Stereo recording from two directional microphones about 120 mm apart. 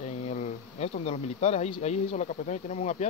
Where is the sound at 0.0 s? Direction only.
65° left (ahead or behind).